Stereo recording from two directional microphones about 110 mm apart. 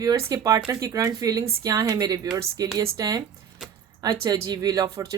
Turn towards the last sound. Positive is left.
turn(degrees=-30)  # may be behind; listen again after turning